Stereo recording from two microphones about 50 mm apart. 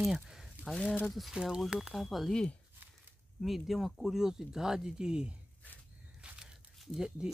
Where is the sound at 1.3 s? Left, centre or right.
Centre.